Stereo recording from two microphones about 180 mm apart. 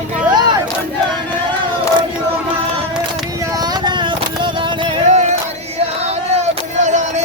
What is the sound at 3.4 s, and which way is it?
Music, 20° right (ahead or behind).